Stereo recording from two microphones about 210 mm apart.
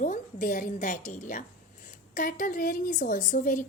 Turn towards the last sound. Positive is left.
turn(degrees=40)  # may be behind; listen again after turning